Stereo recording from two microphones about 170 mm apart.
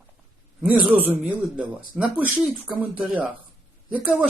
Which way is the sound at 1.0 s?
5° right (ahead or behind).